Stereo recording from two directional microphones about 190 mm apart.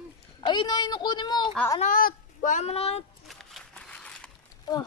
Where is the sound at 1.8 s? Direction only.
45° left (ahead or behind).